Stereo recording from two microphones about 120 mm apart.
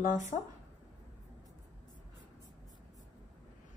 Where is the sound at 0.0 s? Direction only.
90° left.